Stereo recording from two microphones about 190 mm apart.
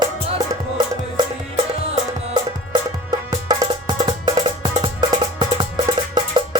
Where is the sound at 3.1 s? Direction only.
20° right (ahead or behind).